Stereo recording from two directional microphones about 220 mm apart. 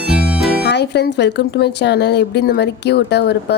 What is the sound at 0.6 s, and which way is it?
Speech, 50° left (ahead or behind).